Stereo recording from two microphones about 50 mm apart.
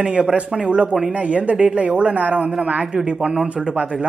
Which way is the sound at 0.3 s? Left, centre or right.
Right.